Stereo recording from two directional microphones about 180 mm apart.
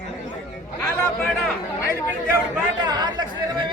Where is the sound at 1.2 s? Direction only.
Centre (ahead or behind).